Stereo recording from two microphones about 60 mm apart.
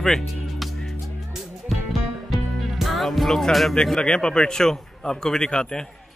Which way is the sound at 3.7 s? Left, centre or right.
Centre.